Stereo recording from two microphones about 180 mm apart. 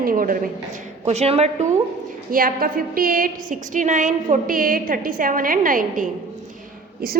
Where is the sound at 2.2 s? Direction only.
50° right (ahead or behind).